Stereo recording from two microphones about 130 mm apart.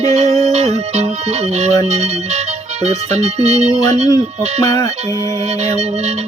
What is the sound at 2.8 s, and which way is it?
Speech, 55° right (ahead or behind).